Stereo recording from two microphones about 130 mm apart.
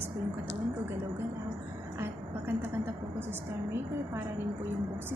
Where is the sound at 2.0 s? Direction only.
15° right (ahead or behind).